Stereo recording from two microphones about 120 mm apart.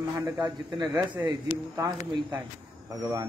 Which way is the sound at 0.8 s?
15° right (ahead or behind).